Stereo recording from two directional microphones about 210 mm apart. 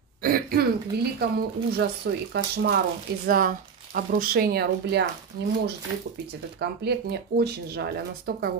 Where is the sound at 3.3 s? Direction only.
40° right (ahead or behind).